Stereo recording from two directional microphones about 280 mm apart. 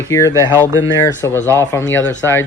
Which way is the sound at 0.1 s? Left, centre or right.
Centre.